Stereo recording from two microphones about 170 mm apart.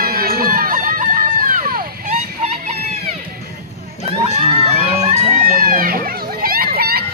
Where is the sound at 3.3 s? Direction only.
60° right (ahead or behind).